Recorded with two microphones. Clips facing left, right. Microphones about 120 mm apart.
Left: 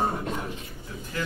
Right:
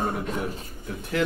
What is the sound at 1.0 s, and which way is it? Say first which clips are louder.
Speech: right 7 dB; 70° right (ahead or behind).